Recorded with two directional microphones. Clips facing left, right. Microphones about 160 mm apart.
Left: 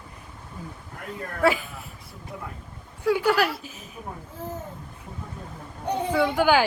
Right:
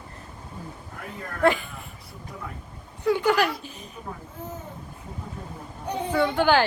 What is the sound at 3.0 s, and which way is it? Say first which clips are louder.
Speech: even; 5° left (ahead or behind).